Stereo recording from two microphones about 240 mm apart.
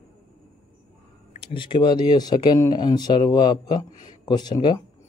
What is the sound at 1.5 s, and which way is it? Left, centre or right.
Speech, centre.